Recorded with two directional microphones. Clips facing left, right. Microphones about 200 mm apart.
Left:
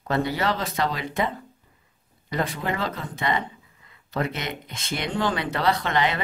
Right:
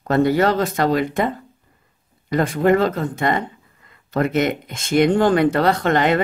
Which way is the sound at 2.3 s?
50° right (ahead or behind).